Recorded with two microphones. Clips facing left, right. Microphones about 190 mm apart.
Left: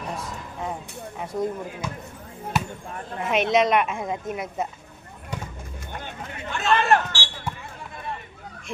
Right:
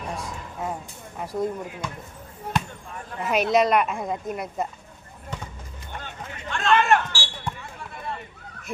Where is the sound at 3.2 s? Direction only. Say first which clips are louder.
Even; centre (ahead or behind).